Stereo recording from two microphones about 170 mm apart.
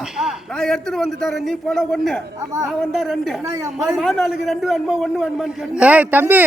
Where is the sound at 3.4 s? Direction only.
15° right (ahead or behind).